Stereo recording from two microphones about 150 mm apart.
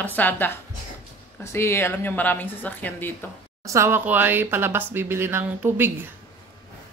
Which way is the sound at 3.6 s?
20° right (ahead or behind).